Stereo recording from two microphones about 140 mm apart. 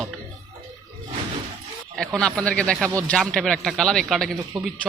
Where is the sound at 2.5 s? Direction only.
10° left (ahead or behind).